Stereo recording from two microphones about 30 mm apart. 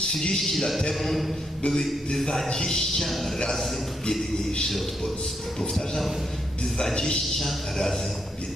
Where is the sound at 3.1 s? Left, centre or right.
Centre.